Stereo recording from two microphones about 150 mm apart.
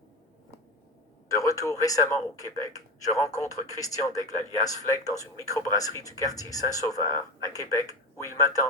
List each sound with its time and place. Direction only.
1.3 s speech: 20° left (ahead or behind)